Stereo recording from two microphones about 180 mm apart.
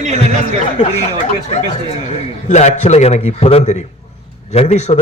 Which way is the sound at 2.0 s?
40° left (ahead or behind).